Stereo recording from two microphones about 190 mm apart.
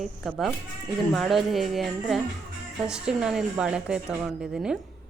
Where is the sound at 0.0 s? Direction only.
Centre (ahead or behind).